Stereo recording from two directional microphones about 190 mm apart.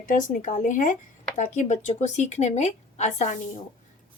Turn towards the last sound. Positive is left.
turn(degrees=35)  # may be behind; listen again after turning